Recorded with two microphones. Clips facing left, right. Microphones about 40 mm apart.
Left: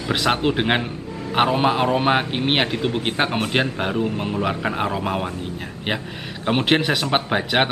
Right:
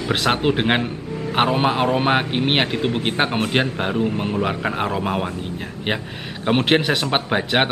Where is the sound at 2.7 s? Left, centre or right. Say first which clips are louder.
Right 1 dB; right.